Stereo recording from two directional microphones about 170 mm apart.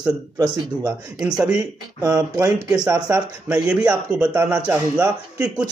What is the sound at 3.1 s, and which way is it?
A man's voice, 10° right (ahead or behind).